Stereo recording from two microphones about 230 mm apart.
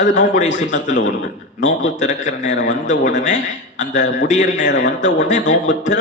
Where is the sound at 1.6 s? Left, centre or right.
Left.